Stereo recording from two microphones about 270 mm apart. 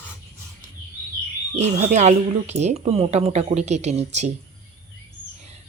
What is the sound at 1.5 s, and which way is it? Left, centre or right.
Speech, right.